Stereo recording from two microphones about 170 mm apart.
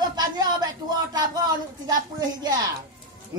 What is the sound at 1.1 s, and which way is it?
A woman's voice, 25° right (ahead or behind).